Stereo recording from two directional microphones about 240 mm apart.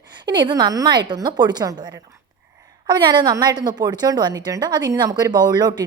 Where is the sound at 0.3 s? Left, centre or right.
Centre.